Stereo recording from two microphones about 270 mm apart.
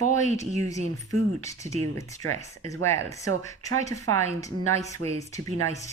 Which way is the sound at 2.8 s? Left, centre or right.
Centre.